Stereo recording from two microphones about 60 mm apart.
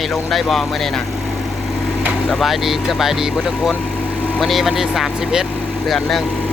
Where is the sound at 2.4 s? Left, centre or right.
Centre.